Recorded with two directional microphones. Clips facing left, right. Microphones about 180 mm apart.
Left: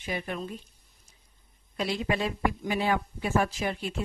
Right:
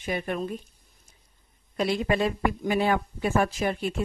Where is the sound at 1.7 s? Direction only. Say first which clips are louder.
Right 4 dB; 50° right (ahead or behind).